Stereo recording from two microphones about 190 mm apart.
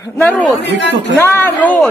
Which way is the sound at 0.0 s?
10° left (ahead or behind).